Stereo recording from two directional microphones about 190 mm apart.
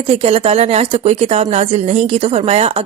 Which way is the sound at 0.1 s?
30° right (ahead or behind).